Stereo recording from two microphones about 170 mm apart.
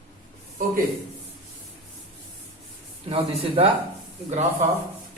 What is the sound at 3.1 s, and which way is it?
Speech, 40° right (ahead or behind).